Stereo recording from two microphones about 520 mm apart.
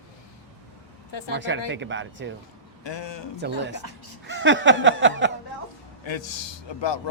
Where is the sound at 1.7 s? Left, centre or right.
Right.